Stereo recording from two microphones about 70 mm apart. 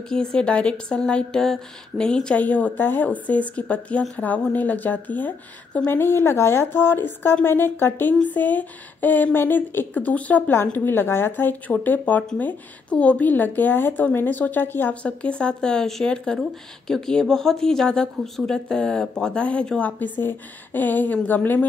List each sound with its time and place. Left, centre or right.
0.1 s speech: centre; by 9.8 s left
9.9 s speech: left
15.0 s speech: centre
20.0 s speech: left